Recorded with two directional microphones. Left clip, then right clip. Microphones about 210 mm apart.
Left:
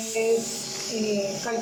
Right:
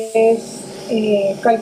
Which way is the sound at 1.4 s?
40° right (ahead or behind).